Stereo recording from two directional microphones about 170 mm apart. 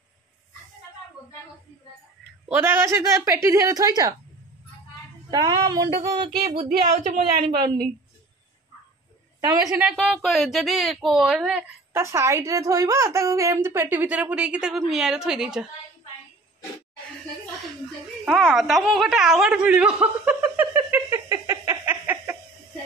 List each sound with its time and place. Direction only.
2.4 s a woman's voice: 15° right (ahead or behind)
5.3 s speech: 25° right (ahead or behind)
6.4 s speech: 35° right (ahead or behind)
9.4 s speech: 20° right (ahead or behind)
9.8 s speech: 5° right (ahead or behind)
11.9 s a woman's voice: 15° right (ahead or behind)
18.2 s a sound: centre (ahead or behind)